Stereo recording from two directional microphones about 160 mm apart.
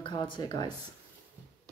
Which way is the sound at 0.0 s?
30° left (ahead or behind).